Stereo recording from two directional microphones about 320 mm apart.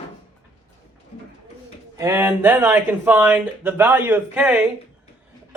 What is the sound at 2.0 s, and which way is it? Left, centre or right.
Speech, centre.